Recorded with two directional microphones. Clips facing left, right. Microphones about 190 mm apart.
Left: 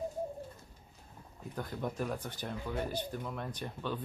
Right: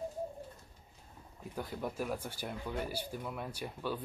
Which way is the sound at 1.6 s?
5° right (ahead or behind).